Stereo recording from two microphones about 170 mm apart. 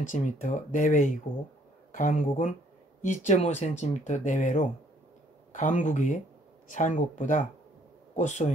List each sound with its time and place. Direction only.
0.0 s speech: 50° left (ahead or behind)